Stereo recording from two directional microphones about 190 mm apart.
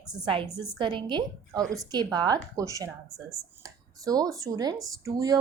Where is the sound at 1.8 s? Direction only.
20° right (ahead or behind).